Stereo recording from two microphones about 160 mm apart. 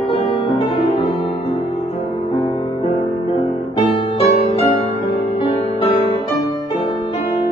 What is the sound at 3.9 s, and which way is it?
Music, 35° left (ahead or behind).